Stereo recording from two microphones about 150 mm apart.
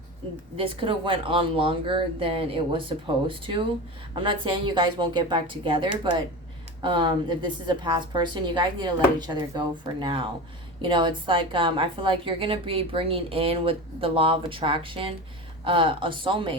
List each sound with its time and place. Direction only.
0.5 s a woman's voice: 35° right (ahead or behind)